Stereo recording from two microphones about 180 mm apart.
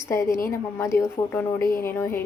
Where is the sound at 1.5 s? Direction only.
55° left (ahead or behind).